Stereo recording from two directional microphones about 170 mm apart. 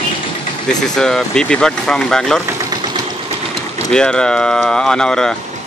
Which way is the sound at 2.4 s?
25° right (ahead or behind).